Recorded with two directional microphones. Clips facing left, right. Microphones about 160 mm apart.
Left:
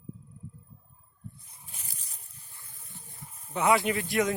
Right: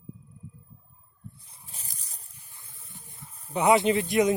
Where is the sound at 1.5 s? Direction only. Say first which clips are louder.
Right 1 dB; 35° right (ahead or behind).